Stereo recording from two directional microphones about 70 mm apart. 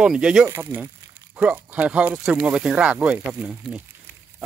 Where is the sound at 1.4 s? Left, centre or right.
Centre.